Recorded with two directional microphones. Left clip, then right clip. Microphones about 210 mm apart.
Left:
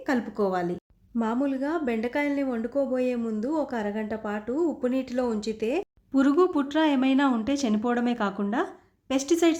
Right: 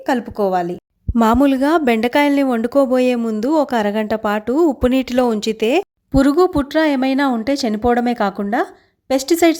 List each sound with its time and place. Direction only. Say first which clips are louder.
0.0 s a woman's voice: right 9 dB; 35° right (ahead or behind)
1.2 s speech: right 14 dB; 50° right (ahead or behind)
6.1 s speech: right 8 dB; 30° right (ahead or behind)